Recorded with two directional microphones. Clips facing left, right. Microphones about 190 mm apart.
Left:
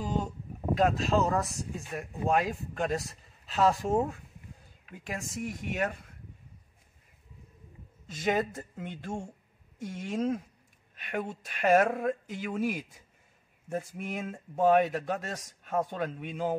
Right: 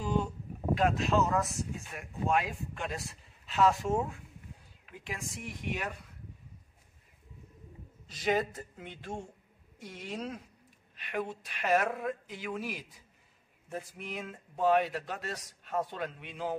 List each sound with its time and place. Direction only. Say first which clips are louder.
0.7 s speech: left 2 dB; 35° left (ahead or behind)
8.1 s speech: left 1 dB; 50° left (ahead or behind)